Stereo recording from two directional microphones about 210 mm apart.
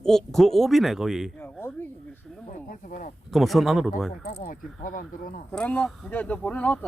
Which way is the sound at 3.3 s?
Centre (ahead or behind).